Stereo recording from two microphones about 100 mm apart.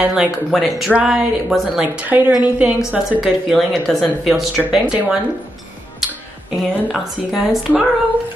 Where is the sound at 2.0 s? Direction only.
20° right (ahead or behind).